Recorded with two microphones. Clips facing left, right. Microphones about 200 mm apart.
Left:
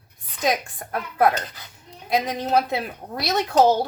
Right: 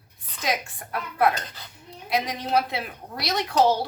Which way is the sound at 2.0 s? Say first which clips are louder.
Left 4 dB; 45° left (ahead or behind).